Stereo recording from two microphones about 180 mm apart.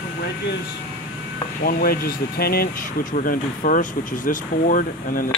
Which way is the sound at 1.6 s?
55° left (ahead or behind).